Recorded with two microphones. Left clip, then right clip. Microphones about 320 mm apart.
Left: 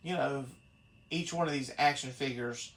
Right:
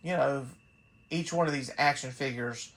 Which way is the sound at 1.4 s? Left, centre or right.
Right.